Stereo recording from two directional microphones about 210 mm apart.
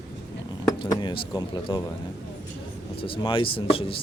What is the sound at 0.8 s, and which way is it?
Speech, 20° left (ahead or behind).